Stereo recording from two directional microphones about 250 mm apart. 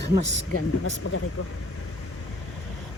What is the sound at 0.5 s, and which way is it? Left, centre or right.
Speech, left.